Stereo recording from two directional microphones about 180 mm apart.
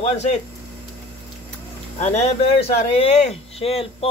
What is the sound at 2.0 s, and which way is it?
Speech, 40° left (ahead or behind).